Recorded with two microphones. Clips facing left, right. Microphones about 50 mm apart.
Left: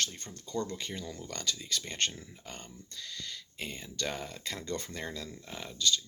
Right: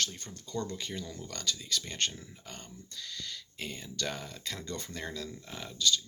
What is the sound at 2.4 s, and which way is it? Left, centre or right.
Speech, left.